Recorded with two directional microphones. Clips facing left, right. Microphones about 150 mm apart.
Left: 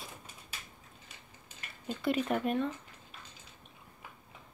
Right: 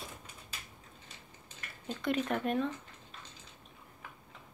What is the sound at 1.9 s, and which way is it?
Speech, 5° left (ahead or behind).